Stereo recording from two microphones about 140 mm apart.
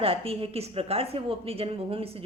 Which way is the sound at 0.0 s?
40° right (ahead or behind).